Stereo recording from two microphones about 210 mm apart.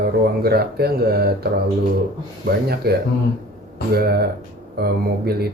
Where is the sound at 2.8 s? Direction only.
50° right (ahead or behind).